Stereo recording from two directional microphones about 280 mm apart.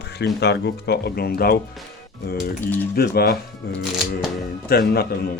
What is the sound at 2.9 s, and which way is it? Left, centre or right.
Speech, left.